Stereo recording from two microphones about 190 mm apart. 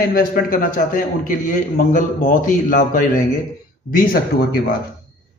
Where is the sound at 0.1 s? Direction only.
50° left (ahead or behind).